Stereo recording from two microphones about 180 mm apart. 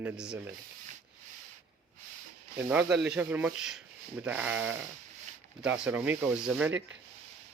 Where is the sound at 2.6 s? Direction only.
10° right (ahead or behind).